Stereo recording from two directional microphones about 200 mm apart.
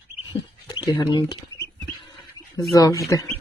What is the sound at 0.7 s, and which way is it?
Speech, 20° left (ahead or behind).